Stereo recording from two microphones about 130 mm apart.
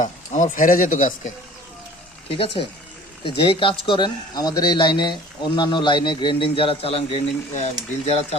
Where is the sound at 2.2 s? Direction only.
45° left (ahead or behind).